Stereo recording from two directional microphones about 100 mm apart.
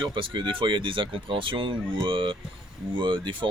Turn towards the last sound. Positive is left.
turn(degrees=-55)  # may be behind; listen again after turning